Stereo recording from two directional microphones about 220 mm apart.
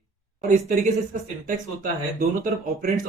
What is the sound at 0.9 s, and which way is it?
Speech, 35° right (ahead or behind).